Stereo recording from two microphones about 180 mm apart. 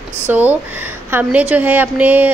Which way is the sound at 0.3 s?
10° right (ahead or behind).